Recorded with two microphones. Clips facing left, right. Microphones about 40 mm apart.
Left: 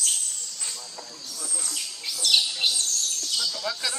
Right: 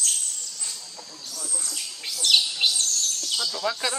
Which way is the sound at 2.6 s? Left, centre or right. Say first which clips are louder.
Right 2 dB; right.